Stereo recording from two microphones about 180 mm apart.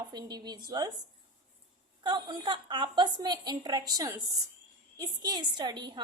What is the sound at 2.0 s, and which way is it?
A woman's voice, 25° right (ahead or behind).